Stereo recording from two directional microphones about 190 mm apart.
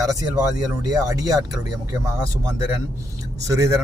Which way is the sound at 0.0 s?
20° right (ahead or behind).